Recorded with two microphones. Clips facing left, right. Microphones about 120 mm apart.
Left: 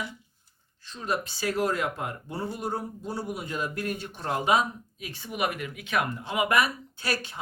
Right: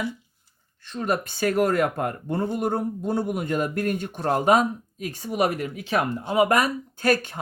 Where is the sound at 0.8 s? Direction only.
55° right (ahead or behind).